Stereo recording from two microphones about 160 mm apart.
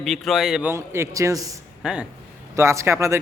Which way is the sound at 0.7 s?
15° right (ahead or behind).